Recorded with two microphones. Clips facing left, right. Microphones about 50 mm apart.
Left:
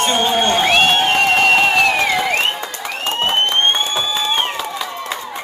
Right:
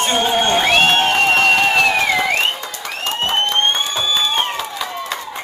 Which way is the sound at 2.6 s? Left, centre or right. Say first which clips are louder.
Left 1 dB; centre.